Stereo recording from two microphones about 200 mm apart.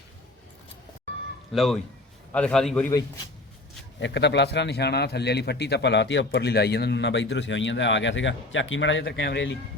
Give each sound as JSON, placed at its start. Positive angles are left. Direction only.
{"t": 1.5, "sound": "a man's voice", "side_deg": 0}
{"t": 4.0, "sound": "a man's voice", "side_deg": 60}